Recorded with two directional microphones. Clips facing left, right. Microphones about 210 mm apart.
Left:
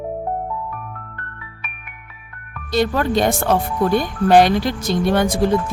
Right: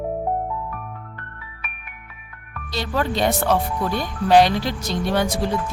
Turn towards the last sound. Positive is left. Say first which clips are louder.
# left 4 dB
turn(degrees=50)  # may be behind; listen again after turning